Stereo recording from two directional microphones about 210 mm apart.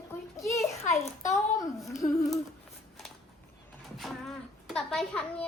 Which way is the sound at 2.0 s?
25° left (ahead or behind).